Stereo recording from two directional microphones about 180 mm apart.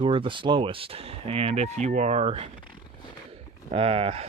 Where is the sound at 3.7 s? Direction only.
30° right (ahead or behind).